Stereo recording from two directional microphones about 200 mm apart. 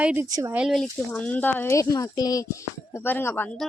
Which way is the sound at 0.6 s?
Centre (ahead or behind).